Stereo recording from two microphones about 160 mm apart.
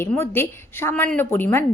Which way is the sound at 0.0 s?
15° left (ahead or behind).